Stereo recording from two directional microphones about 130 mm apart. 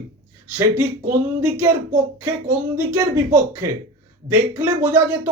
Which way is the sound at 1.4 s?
15° right (ahead or behind).